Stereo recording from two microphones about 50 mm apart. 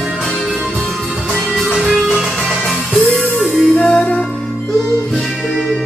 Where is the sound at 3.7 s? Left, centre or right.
Left.